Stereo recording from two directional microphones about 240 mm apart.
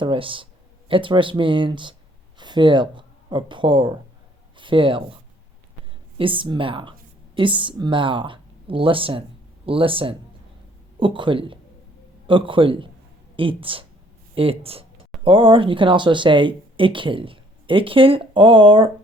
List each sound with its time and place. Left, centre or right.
0.0 s speech: right
6.1 s speech: right